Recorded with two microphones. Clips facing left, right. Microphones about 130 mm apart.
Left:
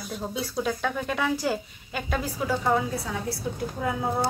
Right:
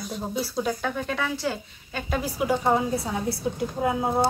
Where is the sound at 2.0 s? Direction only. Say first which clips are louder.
Right 3 dB; 5° right (ahead or behind).